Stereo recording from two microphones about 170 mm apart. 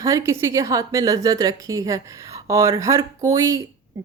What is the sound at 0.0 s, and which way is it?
A woman's voice, 15° right (ahead or behind).